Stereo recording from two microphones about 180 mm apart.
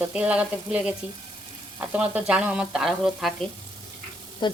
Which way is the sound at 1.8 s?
5° right (ahead or behind).